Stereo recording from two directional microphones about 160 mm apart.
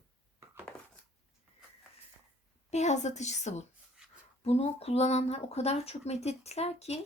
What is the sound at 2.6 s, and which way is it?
A woman's voice, 45° left (ahead or behind).